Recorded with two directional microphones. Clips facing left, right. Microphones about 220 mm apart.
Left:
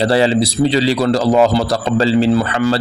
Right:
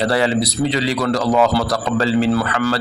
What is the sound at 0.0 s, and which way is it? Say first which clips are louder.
A man's voice: left 4 dB; 30° left (ahead or behind).